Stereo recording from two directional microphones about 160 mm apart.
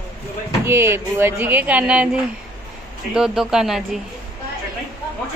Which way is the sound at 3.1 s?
5° right (ahead or behind).